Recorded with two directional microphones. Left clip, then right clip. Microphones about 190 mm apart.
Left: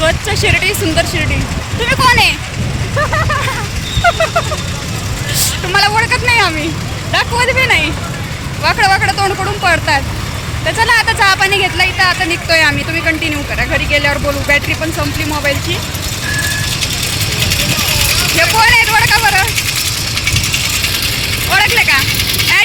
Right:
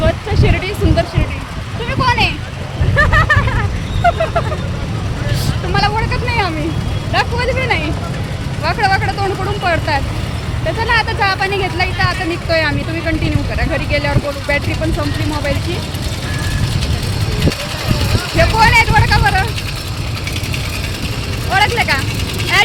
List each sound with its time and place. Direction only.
0.0 s music: 5° left (ahead or behind)
1.8 s vehicle: 10° left (ahead or behind)
3.0 s vehicle: 20° right (ahead or behind)
4.0 s a sound: 5° left (ahead or behind)
5.7 s vehicle: 10° left (ahead or behind)
7.1 s speech: 5° left (ahead or behind)
17.4 s vehicle: 30° right (ahead or behind)
18.5 s speech: 10° right (ahead or behind)
20.2 s ratchet: 45° right (ahead or behind)
21.8 s speech: 15° right (ahead or behind)
22.0 s vehicle: 45° right (ahead or behind)